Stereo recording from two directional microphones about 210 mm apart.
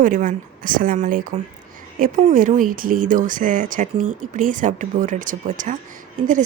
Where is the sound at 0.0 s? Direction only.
40° right (ahead or behind).